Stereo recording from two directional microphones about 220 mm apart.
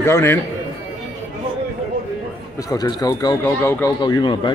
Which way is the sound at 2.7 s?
15° left (ahead or behind).